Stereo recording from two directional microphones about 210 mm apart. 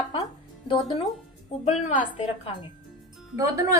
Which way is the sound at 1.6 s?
30° left (ahead or behind).